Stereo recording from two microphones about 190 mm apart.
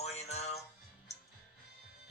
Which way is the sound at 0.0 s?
35° left (ahead or behind).